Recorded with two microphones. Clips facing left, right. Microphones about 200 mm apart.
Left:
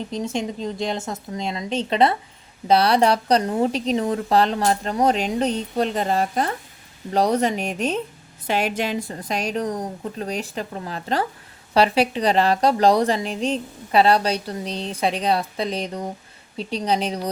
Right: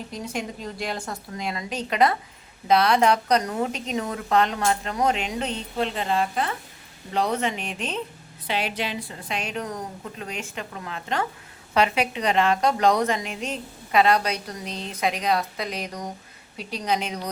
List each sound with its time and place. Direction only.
0.1 s a woman's voice: 25° left (ahead or behind)